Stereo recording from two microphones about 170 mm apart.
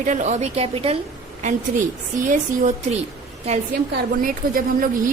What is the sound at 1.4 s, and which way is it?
A woman's voice, 45° right (ahead or behind).